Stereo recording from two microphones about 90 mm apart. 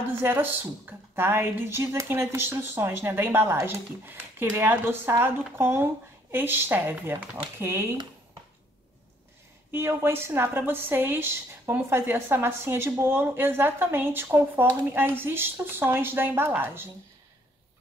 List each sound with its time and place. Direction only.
0.2 s a woman's voice: 25° right (ahead or behind)
9.7 s a woman's voice: 25° right (ahead or behind)